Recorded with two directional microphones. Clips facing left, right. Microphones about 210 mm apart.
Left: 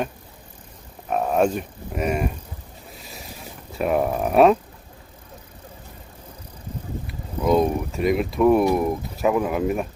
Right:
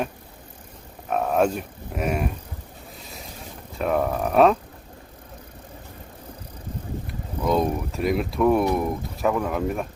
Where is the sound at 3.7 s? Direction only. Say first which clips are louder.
Left 2 dB; 10° left (ahead or behind).